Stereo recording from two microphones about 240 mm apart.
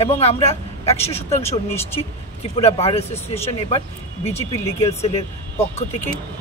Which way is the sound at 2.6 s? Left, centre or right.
Left.